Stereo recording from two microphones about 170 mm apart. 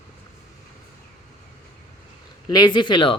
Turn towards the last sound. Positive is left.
turn(degrees=30)  # may be behind; listen again after turning